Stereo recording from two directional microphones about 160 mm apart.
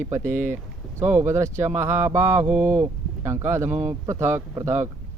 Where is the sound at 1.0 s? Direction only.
15° right (ahead or behind).